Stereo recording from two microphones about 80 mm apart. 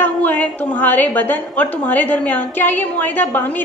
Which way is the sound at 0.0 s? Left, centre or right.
Left.